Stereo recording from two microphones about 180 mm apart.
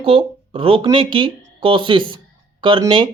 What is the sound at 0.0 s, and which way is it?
Speech, 30° right (ahead or behind).